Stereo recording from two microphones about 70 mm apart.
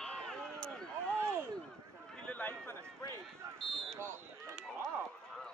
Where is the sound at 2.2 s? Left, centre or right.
Left.